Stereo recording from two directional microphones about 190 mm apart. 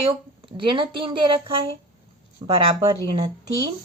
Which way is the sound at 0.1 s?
25° right (ahead or behind).